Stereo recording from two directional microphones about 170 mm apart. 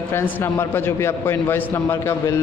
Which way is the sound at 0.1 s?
15° left (ahead or behind).